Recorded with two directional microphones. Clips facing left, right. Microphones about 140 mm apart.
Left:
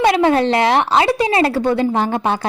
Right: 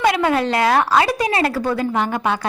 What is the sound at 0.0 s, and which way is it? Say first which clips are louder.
A woman's voice: left 4 dB; 30° left (ahead or behind).